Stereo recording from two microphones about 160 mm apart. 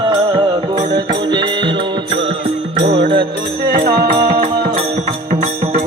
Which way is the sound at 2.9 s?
35° right (ahead or behind).